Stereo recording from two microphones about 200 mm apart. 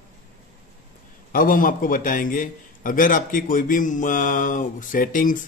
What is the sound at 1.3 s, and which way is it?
A man's voice, 45° left (ahead or behind).